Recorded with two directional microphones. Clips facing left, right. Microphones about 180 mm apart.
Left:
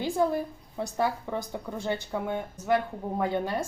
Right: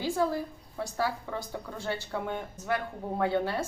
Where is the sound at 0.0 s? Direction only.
20° left (ahead or behind).